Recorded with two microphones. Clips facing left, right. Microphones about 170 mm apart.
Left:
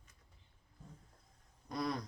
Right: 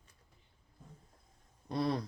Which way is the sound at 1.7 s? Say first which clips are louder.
Right 5 dB; 30° right (ahead or behind).